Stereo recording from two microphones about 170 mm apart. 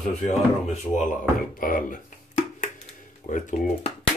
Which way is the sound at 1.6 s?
50° left (ahead or behind).